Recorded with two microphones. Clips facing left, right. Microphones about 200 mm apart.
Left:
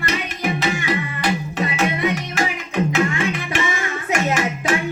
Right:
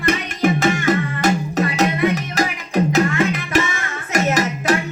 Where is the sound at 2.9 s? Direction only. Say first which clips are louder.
Right 3 dB; 40° right (ahead or behind).